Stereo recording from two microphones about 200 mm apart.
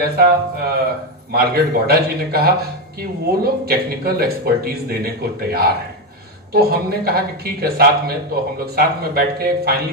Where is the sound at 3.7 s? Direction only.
50° right (ahead or behind).